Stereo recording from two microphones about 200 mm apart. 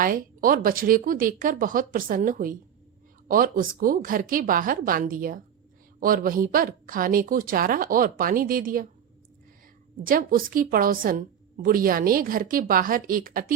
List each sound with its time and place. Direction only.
0.0 s a woman's voice: 45° right (ahead or behind)
10.0 s a woman's voice: 45° right (ahead or behind)